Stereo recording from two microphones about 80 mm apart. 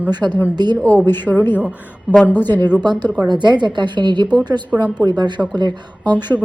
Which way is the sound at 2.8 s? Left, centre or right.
Right.